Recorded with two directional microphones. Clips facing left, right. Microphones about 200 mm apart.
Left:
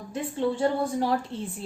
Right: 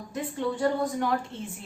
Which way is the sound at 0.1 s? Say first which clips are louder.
Left 3 dB; 30° left (ahead or behind).